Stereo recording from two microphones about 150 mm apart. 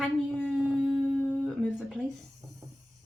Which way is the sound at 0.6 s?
5° right (ahead or behind).